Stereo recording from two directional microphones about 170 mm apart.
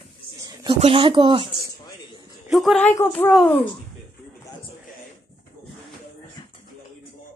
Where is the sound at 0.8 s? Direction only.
30° right (ahead or behind).